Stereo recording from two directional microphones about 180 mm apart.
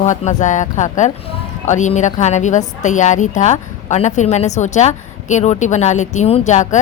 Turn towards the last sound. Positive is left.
turn(degrees=40)  # may be behind; listen again after turning